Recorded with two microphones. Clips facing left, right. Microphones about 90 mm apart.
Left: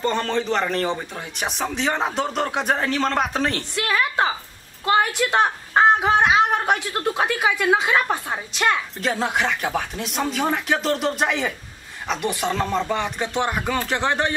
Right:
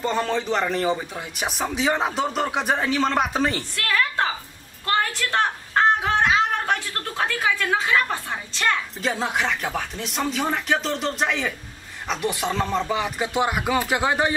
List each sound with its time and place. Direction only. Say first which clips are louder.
0.0 s a man's voice: left 1 dB; 5° right (ahead or behind)
3.7 s a woman's voice: left 2 dB; 20° left (ahead or behind)
9.0 s a man's voice: left 2 dB; centre (ahead or behind)